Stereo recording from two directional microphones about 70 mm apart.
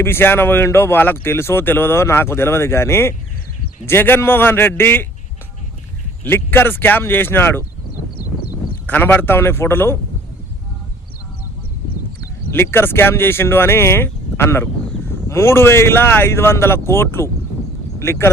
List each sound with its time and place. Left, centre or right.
0.0 s speech: left
6.2 s speech: left
8.9 s speech: left
12.5 s speech: left